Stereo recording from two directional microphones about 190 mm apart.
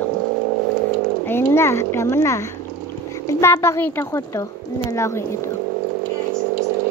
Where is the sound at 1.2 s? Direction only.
10° left (ahead or behind).